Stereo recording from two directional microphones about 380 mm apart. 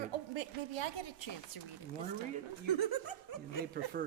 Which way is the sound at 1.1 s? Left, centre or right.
Left.